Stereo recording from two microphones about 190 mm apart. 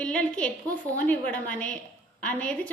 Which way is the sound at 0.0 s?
5° left (ahead or behind).